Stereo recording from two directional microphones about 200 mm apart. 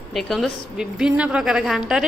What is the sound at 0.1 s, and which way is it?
A woman's voice, centre (ahead or behind).